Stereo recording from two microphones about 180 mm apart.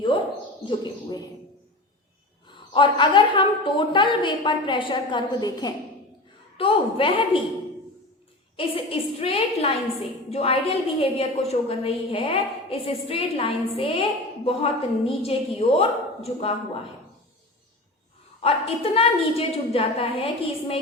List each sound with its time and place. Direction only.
0.6 s speech: 25° left (ahead or behind)
2.5 s a woman's voice: 25° left (ahead or behind)
8.5 s a woman's voice: 30° left (ahead or behind)
18.4 s a woman's voice: 30° left (ahead or behind)